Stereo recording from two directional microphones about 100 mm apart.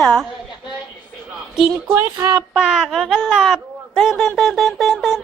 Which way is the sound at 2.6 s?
5° right (ahead or behind).